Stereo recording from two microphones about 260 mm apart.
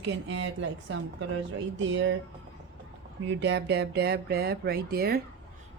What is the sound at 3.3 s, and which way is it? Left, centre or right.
Speech, right.